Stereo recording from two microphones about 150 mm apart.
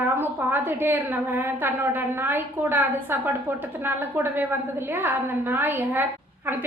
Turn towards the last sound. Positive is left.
turn(degrees=-15)  # may be behind; listen again after turning